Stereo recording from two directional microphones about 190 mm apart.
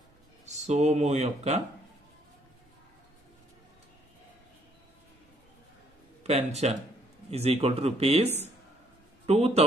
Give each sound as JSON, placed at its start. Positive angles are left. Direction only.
{"t": 0.5, "sound": "speech", "side_deg": -35}
{"t": 6.2, "sound": "speech", "side_deg": -35}